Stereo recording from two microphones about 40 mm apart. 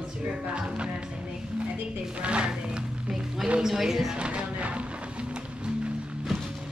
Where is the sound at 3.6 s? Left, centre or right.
Centre.